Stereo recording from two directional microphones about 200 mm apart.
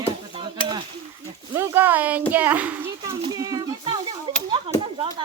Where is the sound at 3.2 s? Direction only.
20° right (ahead or behind).